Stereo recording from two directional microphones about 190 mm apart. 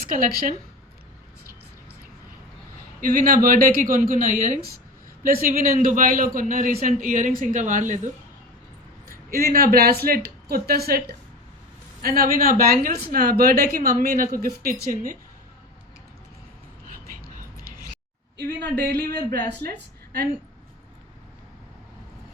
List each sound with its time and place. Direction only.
0.1 s speech: 45° right (ahead or behind)
3.0 s speech: 45° right (ahead or behind)
9.3 s speech: 50° right (ahead or behind)
18.6 s speech: 60° right (ahead or behind)